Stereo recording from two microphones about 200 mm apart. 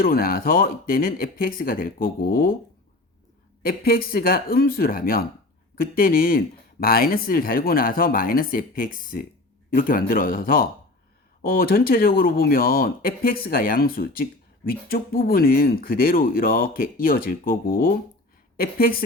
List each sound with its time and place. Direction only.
0.0 s speech: 45° left (ahead or behind)
3.6 s speech: 45° left (ahead or behind)